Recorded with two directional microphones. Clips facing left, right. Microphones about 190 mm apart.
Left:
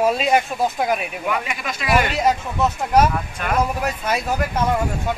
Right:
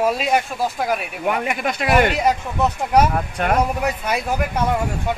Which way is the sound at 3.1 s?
45° right (ahead or behind).